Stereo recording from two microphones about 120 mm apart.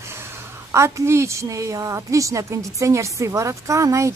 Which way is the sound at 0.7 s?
25° right (ahead or behind).